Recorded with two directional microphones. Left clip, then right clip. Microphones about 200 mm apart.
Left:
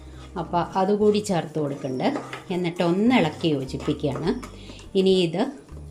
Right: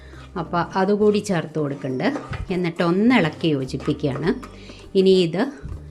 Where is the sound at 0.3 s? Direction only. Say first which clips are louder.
Right 1 dB; 20° right (ahead or behind).